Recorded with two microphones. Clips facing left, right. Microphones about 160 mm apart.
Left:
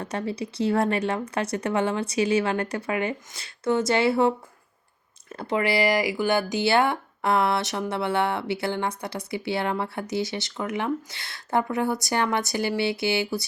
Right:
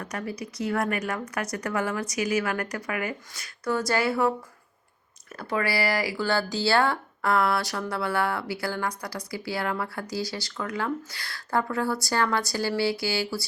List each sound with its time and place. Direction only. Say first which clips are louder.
0.0 s speech: left 4 dB; 30° left (ahead or behind)